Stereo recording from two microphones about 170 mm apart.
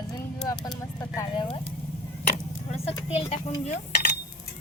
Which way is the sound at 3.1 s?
35° left (ahead or behind).